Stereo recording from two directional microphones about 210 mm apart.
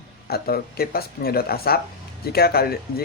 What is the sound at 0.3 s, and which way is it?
Speech, 45° left (ahead or behind).